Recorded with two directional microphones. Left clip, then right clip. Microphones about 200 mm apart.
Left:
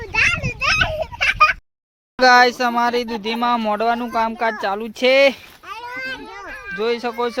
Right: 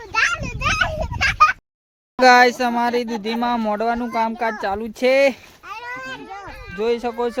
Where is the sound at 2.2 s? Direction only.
25° right (ahead or behind).